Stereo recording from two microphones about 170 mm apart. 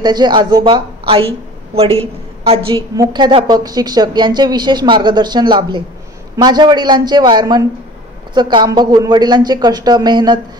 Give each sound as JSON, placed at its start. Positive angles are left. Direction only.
{"t": 0.0, "sound": "a woman's voice", "side_deg": -25}